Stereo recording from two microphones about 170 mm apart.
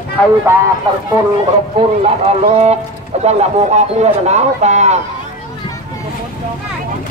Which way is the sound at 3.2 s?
40° right (ahead or behind).